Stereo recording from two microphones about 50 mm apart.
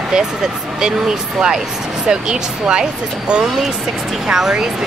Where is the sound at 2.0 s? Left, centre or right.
Centre.